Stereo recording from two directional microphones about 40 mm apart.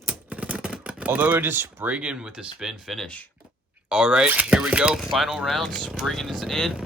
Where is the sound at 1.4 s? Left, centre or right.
Right.